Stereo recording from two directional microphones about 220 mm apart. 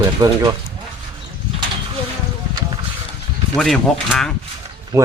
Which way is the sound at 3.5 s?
Centre (ahead or behind).